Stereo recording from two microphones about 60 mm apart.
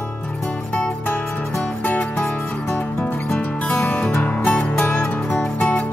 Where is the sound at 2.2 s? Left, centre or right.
Centre.